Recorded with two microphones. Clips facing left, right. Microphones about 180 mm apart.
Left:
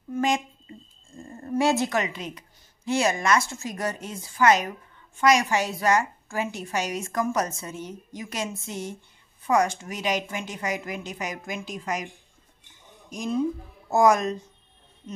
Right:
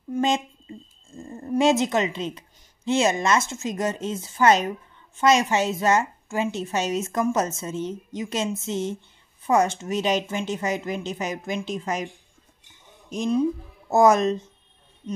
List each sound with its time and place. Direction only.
0.1 s a sound: 25° right (ahead or behind)
1.4 s speech: 20° right (ahead or behind)
13.1 s speech: 25° right (ahead or behind)